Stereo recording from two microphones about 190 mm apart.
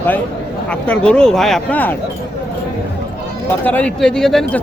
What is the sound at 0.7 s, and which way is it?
Speech, 5° left (ahead or behind).